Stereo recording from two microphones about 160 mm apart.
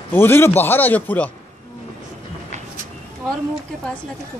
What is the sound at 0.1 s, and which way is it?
Speech, 15° left (ahead or behind).